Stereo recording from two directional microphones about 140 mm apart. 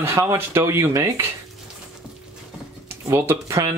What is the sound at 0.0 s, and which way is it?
Speech, 20° right (ahead or behind).